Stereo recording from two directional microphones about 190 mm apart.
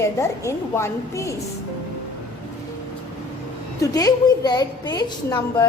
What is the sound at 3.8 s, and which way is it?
A woman's voice, 20° left (ahead or behind).